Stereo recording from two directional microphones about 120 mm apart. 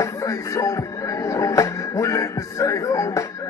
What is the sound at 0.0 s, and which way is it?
Music, 25° left (ahead or behind).